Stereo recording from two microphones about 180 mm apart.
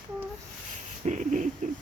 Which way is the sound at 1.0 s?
45° right (ahead or behind).